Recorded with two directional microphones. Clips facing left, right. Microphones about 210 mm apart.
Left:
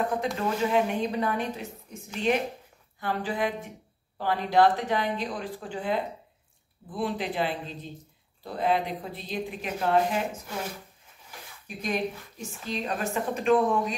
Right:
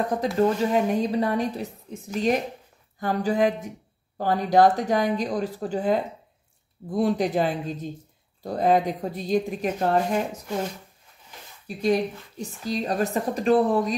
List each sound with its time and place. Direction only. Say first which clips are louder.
0.4 s a woman's voice: right 5 dB; 40° right (ahead or behind)
11.6 s a woman's voice: right 7 dB; 35° right (ahead or behind)